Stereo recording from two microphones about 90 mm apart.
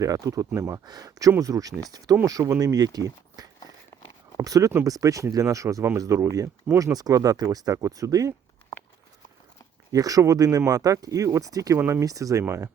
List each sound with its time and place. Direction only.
0.0 s speech: 40° right (ahead or behind)
2.7 s speech: 45° right (ahead or behind)
9.9 s speech: 40° right (ahead or behind)